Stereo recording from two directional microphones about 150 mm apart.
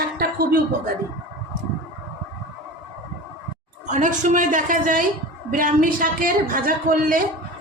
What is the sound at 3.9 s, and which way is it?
A woman's voice, 55° right (ahead or behind).